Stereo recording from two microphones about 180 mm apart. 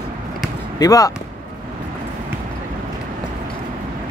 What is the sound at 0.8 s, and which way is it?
Speech, 20° left (ahead or behind).